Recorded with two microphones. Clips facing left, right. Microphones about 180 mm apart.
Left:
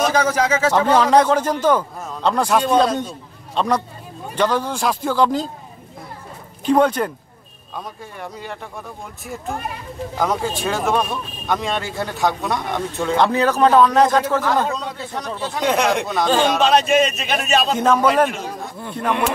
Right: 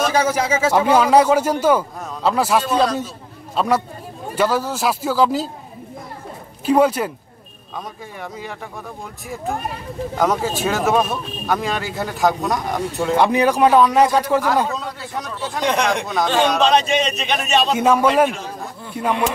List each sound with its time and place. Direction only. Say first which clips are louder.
0.1 s a man's voice: even; 10° right (ahead or behind)
6.6 s a man's voice: even; 5° right (ahead or behind)
10.1 s speech: right 2 dB; centre (ahead or behind)
17.7 s a man's voice: right 1 dB; 10° right (ahead or behind)